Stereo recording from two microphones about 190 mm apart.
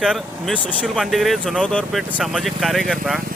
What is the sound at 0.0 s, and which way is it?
Speech, centre (ahead or behind).